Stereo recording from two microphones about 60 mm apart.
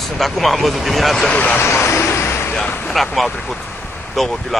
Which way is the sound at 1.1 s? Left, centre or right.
Centre.